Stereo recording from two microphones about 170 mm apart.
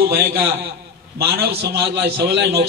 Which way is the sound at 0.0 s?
65° right (ahead or behind).